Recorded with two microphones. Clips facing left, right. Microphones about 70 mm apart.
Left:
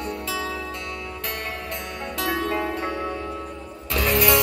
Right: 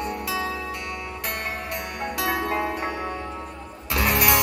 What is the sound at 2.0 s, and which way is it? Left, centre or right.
Music, centre.